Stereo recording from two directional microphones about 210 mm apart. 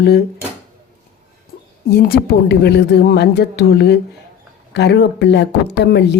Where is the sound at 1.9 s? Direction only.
50° left (ahead or behind).